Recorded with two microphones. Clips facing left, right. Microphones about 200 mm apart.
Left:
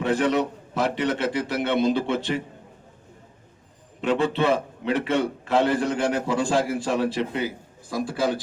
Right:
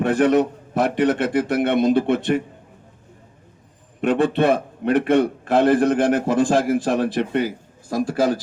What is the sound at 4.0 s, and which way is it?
A man's voice, 60° right (ahead or behind).